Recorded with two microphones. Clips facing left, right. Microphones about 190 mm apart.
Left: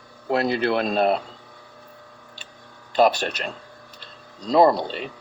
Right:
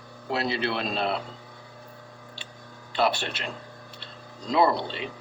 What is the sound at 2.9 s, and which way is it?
Speech, 45° left (ahead or behind).